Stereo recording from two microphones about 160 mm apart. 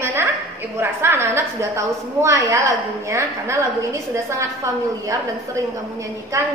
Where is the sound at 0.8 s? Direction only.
15° right (ahead or behind).